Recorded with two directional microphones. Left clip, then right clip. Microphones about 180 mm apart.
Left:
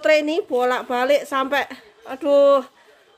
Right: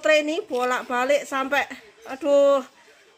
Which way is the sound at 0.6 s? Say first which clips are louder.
Left 3 dB; 15° left (ahead or behind).